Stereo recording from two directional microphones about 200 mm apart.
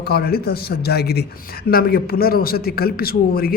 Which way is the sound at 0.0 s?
50° left (ahead or behind).